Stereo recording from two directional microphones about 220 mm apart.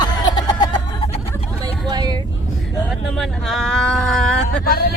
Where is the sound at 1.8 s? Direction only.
20° right (ahead or behind).